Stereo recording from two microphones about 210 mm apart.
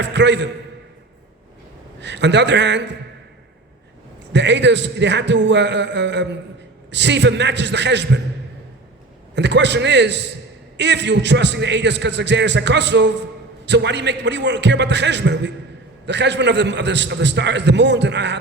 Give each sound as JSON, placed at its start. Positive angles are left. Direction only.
{"t": 0.0, "sound": "a man's voice", "side_deg": -55}
{"t": 2.0, "sound": "a man's voice", "side_deg": -55}
{"t": 4.3, "sound": "a man's voice", "side_deg": -55}
{"t": 9.3, "sound": "a man's voice", "side_deg": -55}